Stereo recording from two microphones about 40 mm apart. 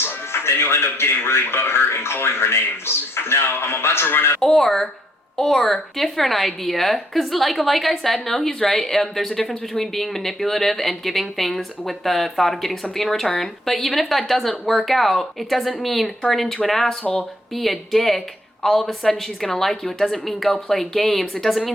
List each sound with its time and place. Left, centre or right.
0.0 s speech: left
4.4 s a woman's voice: centre
17.0 s speech: left
17.5 s a woman's voice: centre